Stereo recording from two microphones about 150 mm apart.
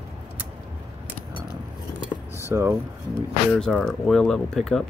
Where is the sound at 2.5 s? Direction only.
15° right (ahead or behind).